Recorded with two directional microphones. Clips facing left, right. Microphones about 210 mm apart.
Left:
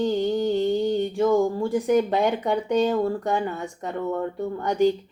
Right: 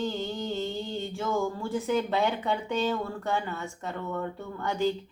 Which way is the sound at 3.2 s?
15° left (ahead or behind).